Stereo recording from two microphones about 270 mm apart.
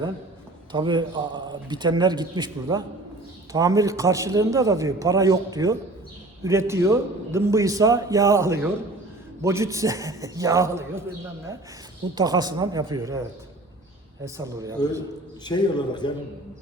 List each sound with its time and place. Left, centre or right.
0.7 s a man's voice: centre
12.1 s a man's voice: centre
14.3 s a man's voice: centre
15.4 s a man's voice: centre